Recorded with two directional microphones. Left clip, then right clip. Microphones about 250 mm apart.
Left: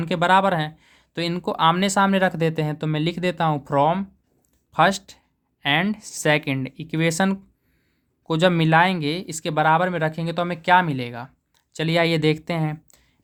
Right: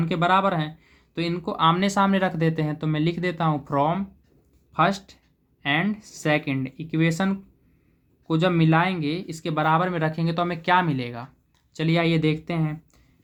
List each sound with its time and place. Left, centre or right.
0.0 s speech: left